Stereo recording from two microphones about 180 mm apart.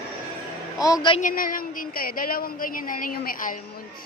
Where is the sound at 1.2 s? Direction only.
50° left (ahead or behind).